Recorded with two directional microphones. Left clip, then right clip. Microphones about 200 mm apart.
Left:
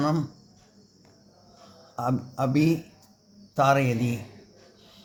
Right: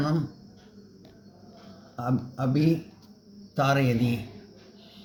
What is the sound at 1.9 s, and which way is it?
A man's voice, 35° left (ahead or behind).